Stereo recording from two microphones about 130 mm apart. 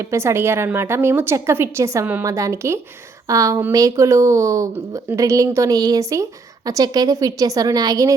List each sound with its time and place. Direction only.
0.1 s speech: 20° right (ahead or behind)